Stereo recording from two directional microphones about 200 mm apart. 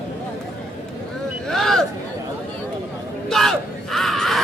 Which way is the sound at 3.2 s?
Centre (ahead or behind).